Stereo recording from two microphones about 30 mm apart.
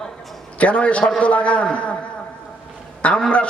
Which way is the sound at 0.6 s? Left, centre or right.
Left.